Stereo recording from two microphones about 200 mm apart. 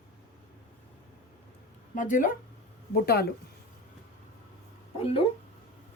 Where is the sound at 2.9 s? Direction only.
50° left (ahead or behind).